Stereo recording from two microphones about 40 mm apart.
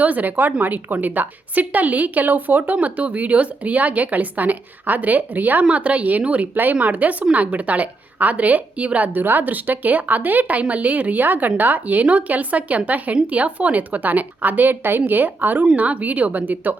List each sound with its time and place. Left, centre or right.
0.0 s a woman's voice: right
2.8 s a woman's voice: right
5.6 s a woman's voice: right
6.5 s a woman's voice: right
9.1 s a woman's voice: right
15.7 s a woman's voice: right